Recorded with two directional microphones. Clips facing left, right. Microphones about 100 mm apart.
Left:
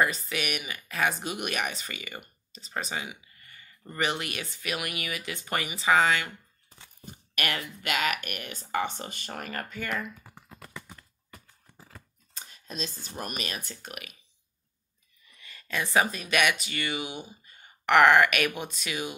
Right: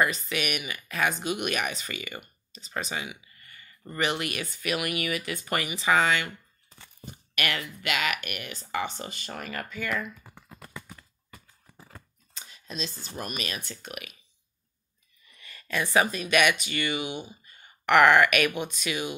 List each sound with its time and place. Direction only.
0.0 s speech: 30° left (ahead or behind)
2.8 s a sound: 30° left (ahead or behind)
4.0 s speech: 30° left (ahead or behind)
7.3 s speech: 35° left (ahead or behind)
10.6 s a sound: 15° right (ahead or behind)
12.4 s scissors: 45° left (ahead or behind)
13.2 s speech: 40° left (ahead or behind)
15.4 s speech: 25° left (ahead or behind)